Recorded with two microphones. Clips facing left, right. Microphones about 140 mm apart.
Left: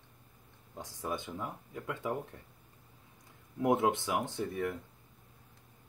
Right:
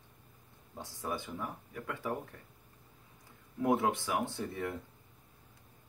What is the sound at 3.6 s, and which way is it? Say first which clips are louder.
Speech: left 1 dB; 20° left (ahead or behind).